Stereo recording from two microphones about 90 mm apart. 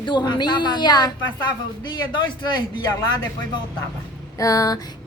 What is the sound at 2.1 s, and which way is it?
Speech, 55° left (ahead or behind).